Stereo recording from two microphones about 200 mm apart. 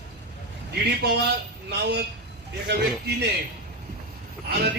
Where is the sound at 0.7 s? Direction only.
55° right (ahead or behind).